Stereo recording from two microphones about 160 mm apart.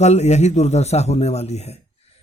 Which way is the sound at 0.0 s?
45° left (ahead or behind).